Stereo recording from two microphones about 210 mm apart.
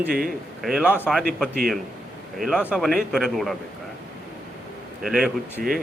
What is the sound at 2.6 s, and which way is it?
Speech, centre (ahead or behind).